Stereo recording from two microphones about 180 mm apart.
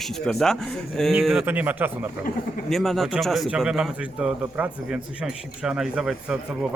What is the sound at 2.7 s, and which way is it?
Speech, centre (ahead or behind).